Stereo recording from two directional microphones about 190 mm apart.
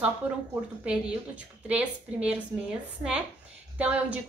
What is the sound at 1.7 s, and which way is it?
Speech, 5° right (ahead or behind).